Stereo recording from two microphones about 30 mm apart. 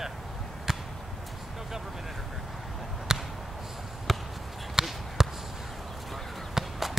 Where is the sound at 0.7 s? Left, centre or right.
Centre.